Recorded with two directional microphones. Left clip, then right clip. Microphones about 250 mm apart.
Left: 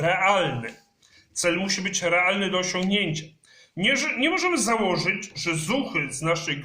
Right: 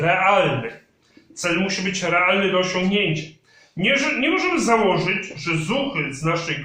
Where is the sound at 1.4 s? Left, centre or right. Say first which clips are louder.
Right 3 dB; left.